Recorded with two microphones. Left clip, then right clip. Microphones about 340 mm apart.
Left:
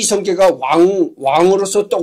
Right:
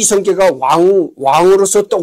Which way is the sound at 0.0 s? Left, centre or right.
Right.